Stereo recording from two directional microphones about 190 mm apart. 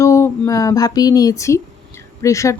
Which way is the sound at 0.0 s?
15° left (ahead or behind).